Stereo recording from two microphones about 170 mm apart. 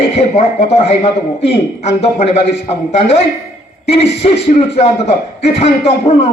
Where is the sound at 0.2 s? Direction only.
40° left (ahead or behind).